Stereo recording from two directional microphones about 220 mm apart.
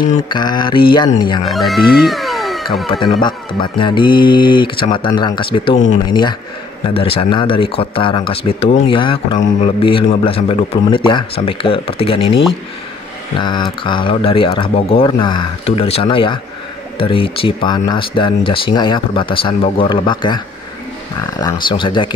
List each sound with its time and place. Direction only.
0.3 s speech: 20° left (ahead or behind)
1.5 s speech: centre (ahead or behind)
2.9 s speech: 20° left (ahead or behind)
6.9 s speech: 25° left (ahead or behind)